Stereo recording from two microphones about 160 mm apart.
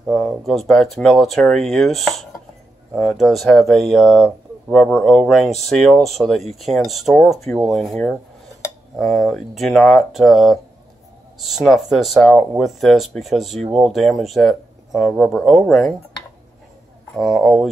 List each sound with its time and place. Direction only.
0.0 s speech: centre (ahead or behind)
17.1 s speech: centre (ahead or behind)